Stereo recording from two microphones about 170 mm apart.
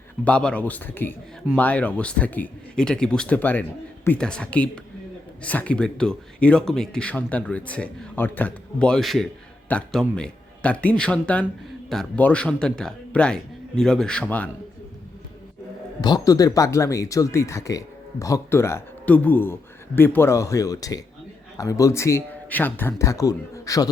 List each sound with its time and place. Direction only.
0.3 s a man's voice: 5° left (ahead or behind)
16.0 s speech: 25° left (ahead or behind)